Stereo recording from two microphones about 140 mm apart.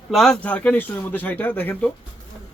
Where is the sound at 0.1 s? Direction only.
5° left (ahead or behind).